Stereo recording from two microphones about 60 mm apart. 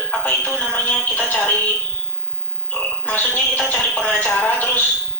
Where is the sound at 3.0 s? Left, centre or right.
Left.